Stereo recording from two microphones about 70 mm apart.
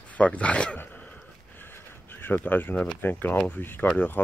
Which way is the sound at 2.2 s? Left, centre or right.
Left.